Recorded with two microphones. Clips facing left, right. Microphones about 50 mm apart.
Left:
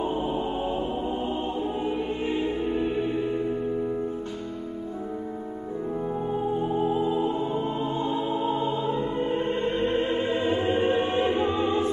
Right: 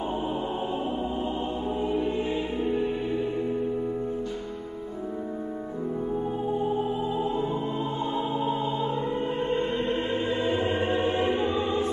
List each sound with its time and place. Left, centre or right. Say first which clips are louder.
8.1 s music: left 1 dB; centre
10.2 s music: left 1 dB; centre